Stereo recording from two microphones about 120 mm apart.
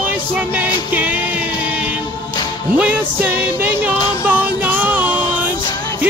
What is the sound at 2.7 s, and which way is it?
Music, 15° right (ahead or behind).